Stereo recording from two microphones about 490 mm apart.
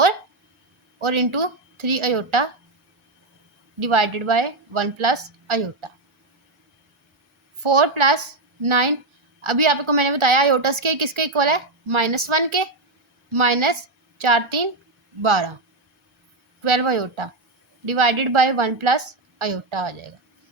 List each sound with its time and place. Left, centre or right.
0.9 s a woman's voice: right
3.8 s a woman's voice: right
7.6 s a woman's voice: right
16.6 s a woman's voice: right